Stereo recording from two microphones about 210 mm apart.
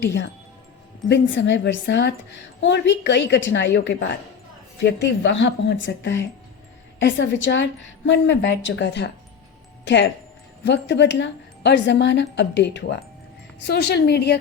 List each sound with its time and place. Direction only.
0.0 s a woman's voice: 55° left (ahead or behind)